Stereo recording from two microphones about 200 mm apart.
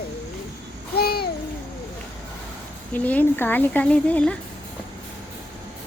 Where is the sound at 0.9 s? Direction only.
50° left (ahead or behind).